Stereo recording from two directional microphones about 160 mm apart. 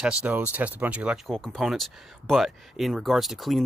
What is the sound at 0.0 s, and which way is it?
Speech, 5° right (ahead or behind).